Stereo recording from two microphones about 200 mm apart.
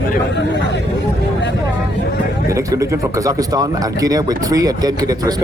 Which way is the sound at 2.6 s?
15° right (ahead or behind).